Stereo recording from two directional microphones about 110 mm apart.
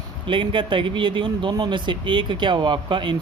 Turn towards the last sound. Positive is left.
turn(degrees=-45)  # may be behind; listen again after turning